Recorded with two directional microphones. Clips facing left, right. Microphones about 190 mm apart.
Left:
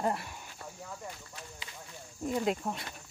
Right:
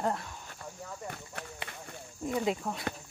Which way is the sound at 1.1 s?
60° right (ahead or behind).